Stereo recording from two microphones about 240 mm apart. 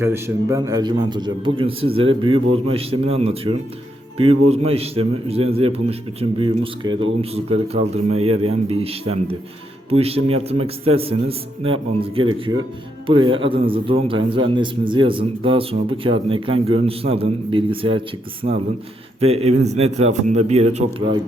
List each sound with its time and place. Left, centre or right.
0.0 s a man's voice: centre; by 21.2 s right